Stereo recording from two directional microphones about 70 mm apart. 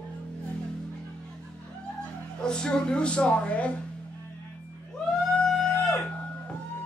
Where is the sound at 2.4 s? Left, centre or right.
Centre.